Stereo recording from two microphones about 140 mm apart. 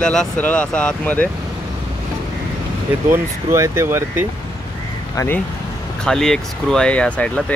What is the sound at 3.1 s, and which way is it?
Speech, 15° right (ahead or behind).